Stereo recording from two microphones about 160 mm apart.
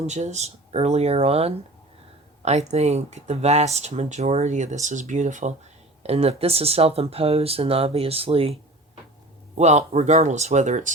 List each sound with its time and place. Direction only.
0.0 s speech: 45° right (ahead or behind)
9.6 s speech: 45° right (ahead or behind)